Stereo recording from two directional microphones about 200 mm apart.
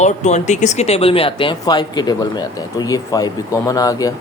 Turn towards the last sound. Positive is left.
turn(degrees=15)  # may be behind; listen again after turning